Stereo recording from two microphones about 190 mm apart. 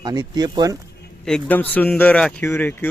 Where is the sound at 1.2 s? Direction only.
5° left (ahead or behind).